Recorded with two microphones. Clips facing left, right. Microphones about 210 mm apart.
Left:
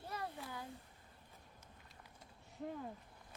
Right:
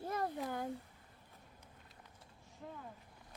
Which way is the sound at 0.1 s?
50° right (ahead or behind).